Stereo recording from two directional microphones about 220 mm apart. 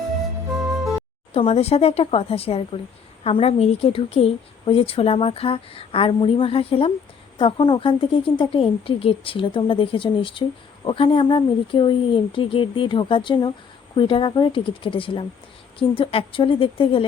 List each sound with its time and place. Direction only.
0.7 s music: centre (ahead or behind)
1.3 s a woman's voice: 25° left (ahead or behind)